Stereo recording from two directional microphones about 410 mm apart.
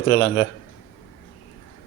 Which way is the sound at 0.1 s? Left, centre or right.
Left.